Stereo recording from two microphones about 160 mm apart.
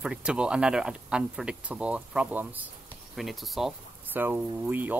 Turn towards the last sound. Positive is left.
turn(degrees=-10)  # may be behind; listen again after turning